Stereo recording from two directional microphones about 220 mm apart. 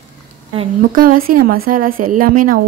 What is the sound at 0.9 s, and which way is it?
Speech, 40° right (ahead or behind).